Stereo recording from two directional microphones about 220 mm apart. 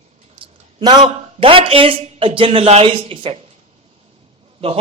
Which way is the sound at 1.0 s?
25° right (ahead or behind).